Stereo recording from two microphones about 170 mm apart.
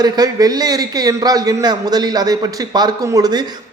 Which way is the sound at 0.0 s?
20° right (ahead or behind).